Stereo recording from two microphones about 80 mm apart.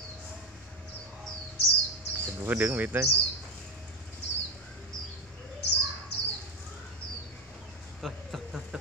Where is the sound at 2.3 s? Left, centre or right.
Right.